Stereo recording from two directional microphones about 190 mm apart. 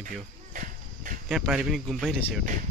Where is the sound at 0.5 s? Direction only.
45° right (ahead or behind).